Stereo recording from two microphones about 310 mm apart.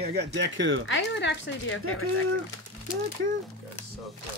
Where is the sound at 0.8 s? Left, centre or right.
Left.